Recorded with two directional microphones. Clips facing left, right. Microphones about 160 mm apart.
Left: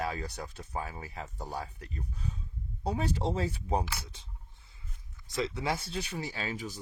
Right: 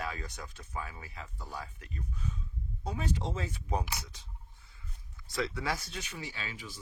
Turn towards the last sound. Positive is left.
turn(degrees=40)  # may be behind; listen again after turning